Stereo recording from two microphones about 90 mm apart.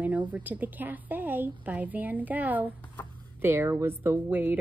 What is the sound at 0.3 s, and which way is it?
A woman's voice, 20° right (ahead or behind).